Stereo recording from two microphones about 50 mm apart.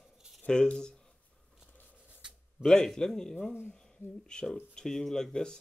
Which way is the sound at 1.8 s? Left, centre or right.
Left.